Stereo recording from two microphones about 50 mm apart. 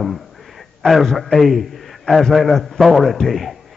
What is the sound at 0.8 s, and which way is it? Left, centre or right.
A man's voice, centre.